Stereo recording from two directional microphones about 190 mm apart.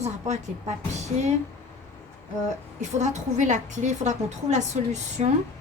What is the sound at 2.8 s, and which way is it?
A woman's voice, 40° right (ahead or behind).